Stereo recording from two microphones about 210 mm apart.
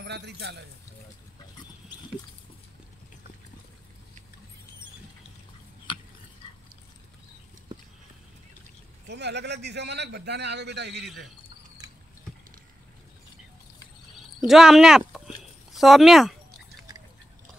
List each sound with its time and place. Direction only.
0.0 s a man's voice: 55° right (ahead or behind)
5.9 s a sound: 25° left (ahead or behind)
9.1 s a man's voice: 55° right (ahead or behind)
14.5 s speech: centre (ahead or behind)